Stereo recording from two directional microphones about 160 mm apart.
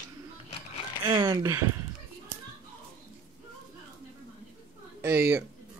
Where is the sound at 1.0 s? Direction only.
25° right (ahead or behind).